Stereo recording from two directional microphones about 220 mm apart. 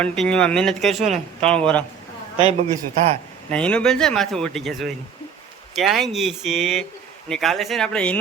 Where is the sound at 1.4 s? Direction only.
5° left (ahead or behind).